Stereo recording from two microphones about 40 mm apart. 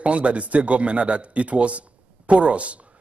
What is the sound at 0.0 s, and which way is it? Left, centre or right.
Speech, right.